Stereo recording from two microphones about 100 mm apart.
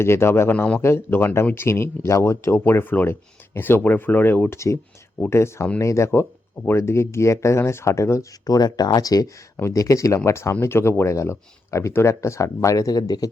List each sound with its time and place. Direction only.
0.0 s speech: 25° left (ahead or behind)